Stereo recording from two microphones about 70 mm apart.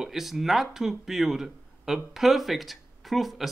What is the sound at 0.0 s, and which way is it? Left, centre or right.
Speech, centre.